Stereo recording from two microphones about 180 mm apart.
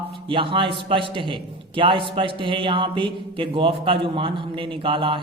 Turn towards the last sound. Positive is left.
turn(degrees=-30)  # may be behind; listen again after turning